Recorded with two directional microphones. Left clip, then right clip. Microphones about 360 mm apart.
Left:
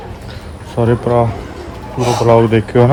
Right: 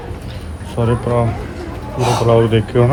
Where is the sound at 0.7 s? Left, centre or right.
Centre.